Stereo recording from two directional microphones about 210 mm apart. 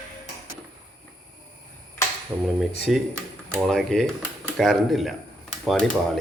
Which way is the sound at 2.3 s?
10° right (ahead or behind).